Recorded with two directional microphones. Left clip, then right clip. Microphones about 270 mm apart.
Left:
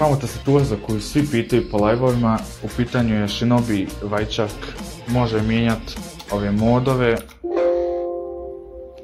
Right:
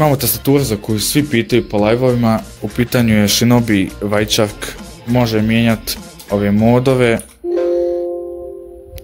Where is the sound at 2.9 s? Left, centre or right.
Right.